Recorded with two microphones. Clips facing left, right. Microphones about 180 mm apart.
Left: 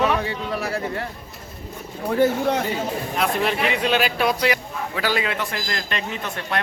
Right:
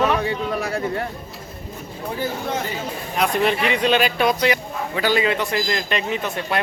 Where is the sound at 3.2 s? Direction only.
Centre (ahead or behind).